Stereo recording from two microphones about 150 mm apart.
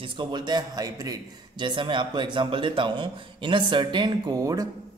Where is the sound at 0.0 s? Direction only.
35° right (ahead or behind).